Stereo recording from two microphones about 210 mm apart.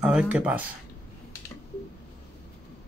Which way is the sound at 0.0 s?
5° right (ahead or behind).